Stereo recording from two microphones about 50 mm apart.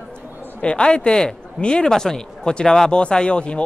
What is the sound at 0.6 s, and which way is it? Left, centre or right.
A man's voice, centre.